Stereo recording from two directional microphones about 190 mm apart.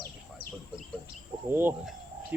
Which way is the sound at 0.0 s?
50° left (ahead or behind).